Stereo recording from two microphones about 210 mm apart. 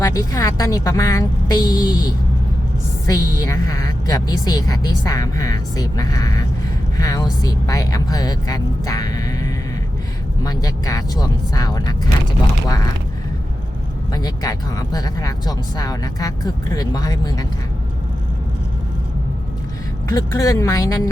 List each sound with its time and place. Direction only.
0.0 s a woman's voice: 15° left (ahead or behind)
14.1 s a woman's voice: 20° left (ahead or behind)
20.1 s a woman's voice: 15° left (ahead or behind)